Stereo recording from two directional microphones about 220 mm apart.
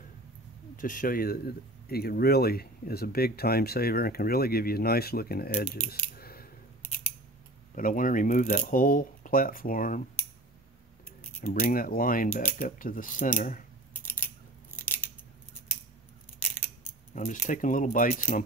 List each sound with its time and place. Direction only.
0.7 s speech: 35° left (ahead or behind)
5.9 s scissors: 45° left (ahead or behind)
7.7 s speech: 40° left (ahead or behind)
11.4 s speech: 40° left (ahead or behind)
13.9 s scissors: 10° left (ahead or behind)
17.1 s speech: 40° left (ahead or behind)